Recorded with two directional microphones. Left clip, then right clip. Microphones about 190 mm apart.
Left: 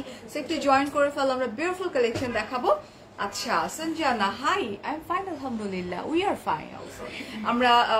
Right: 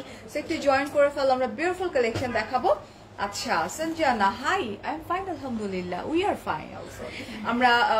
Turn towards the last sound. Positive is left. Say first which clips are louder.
# even
turn(degrees=15)  # may be behind; listen again after turning